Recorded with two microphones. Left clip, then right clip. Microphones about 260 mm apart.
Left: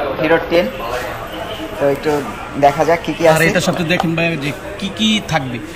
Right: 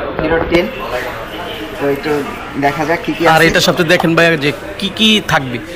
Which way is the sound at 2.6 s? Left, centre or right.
Left.